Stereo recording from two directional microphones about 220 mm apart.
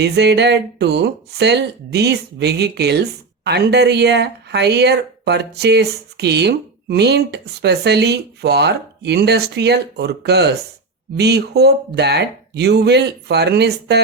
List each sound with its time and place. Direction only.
0.0 s speech: 50° right (ahead or behind)